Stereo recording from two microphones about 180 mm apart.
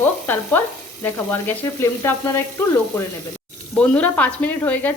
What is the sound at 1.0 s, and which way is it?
Speech, 10° left (ahead or behind).